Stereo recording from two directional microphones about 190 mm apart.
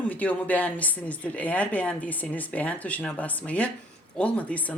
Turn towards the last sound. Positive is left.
turn(degrees=5)  # may be behind; listen again after turning